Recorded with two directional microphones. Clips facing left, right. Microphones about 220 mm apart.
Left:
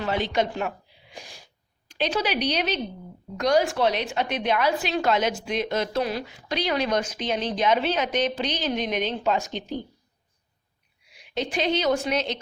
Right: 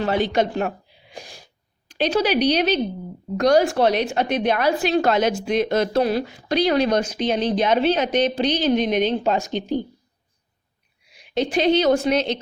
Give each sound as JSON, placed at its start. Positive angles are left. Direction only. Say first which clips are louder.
{"t": 0.3, "sound": "a woman's voice", "louder": "right 4 dB", "side_deg": -40}
{"t": 1.1, "sound": "sneeze", "louder": "right 4 dB", "side_deg": -35}
{"t": 2.0, "sound": "a woman's voice", "louder": "right 6 dB", "side_deg": -40}
{"t": 11.3, "sound": "a woman's voice", "louder": "right 7 dB", "side_deg": -30}